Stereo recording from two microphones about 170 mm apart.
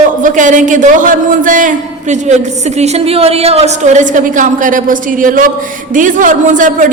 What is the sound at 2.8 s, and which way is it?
A man's voice, 35° right (ahead or behind).